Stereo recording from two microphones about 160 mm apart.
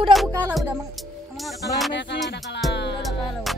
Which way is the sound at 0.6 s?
5° right (ahead or behind).